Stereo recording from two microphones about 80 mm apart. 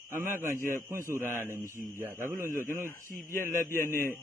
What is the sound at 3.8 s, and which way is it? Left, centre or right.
Speech, right.